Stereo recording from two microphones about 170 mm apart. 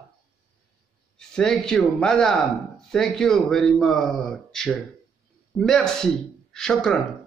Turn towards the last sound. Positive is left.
turn(degrees=5)  # may be behind; listen again after turning